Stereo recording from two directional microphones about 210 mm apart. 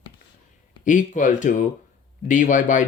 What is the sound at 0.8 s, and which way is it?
Speech, 35° left (ahead or behind).